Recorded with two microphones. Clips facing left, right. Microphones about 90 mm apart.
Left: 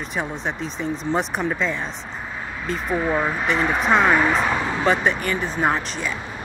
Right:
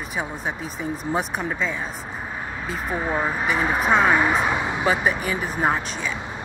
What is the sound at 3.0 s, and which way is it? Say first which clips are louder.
Speech: left 2 dB; 15° right (ahead or behind).